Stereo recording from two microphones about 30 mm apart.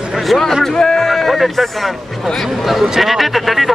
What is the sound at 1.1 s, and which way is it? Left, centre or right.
Speech, centre.